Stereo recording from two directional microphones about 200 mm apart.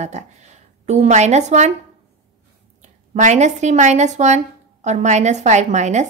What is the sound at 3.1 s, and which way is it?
A woman's voice, 35° right (ahead or behind).